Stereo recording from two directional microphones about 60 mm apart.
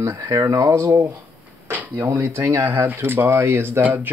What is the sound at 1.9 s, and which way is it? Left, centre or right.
Speech, right.